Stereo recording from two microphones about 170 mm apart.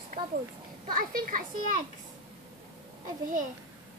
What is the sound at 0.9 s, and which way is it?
Speech, 55° right (ahead or behind).